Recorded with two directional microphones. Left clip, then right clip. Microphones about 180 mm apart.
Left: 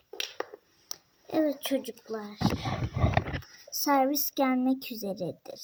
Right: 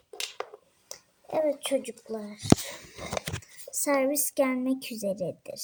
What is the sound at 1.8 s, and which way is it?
Speech, 25° left (ahead or behind).